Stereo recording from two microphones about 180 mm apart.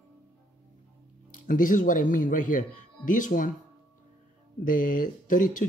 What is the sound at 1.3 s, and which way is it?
Speech, 50° left (ahead or behind).